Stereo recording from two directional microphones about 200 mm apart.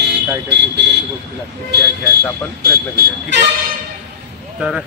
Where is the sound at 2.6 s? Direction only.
50° right (ahead or behind).